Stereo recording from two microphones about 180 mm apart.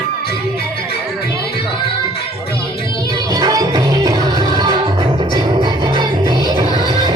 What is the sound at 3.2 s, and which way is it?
Music, 20° right (ahead or behind).